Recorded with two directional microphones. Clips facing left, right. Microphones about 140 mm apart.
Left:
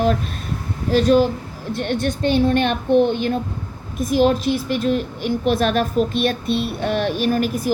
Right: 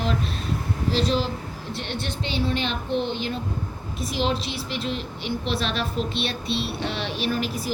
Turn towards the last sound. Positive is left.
turn(degrees=50)  # may be behind; listen again after turning